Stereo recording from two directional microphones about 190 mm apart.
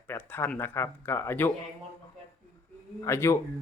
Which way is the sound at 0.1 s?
10° left (ahead or behind).